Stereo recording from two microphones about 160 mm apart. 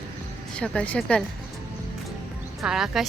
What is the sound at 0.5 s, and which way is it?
Speech, 5° left (ahead or behind).